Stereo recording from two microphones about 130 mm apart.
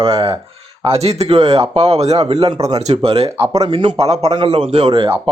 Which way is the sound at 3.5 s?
35° right (ahead or behind).